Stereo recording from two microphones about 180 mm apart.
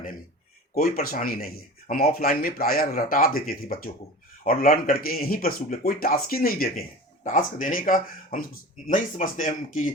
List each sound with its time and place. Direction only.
0.7 s speech: 55° left (ahead or behind)